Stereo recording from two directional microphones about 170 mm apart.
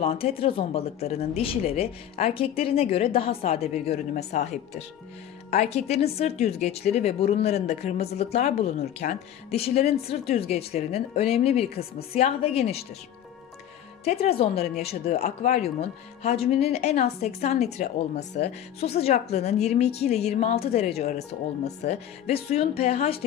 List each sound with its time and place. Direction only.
0.0 s speech: 35° left (ahead or behind)
14.0 s speech: 35° left (ahead or behind)